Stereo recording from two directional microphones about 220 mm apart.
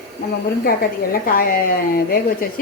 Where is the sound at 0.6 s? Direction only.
40° left (ahead or behind).